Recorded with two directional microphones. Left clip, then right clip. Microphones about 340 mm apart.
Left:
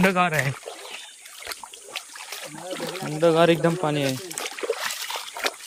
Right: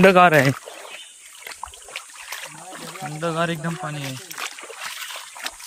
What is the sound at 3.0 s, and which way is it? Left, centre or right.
Speech, centre.